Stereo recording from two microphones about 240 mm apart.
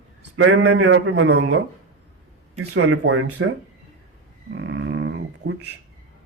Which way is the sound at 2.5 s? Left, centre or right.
Right.